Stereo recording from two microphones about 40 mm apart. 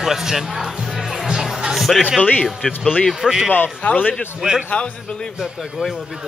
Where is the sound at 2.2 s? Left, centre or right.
Left.